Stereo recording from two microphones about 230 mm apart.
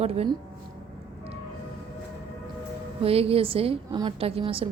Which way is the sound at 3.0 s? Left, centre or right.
Right.